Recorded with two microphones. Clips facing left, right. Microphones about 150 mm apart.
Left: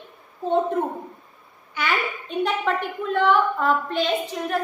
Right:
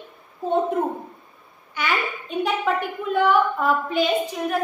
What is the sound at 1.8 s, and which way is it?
A woman's voice, centre (ahead or behind).